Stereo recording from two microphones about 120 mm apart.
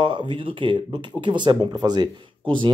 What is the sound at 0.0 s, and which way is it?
Speech, 45° right (ahead or behind).